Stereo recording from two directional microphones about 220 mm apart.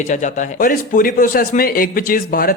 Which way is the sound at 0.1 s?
35° left (ahead or behind).